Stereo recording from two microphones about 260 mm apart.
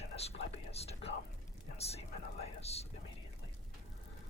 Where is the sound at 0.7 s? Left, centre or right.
Left.